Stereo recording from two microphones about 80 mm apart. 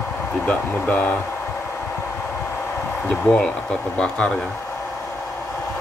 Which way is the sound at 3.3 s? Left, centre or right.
Centre.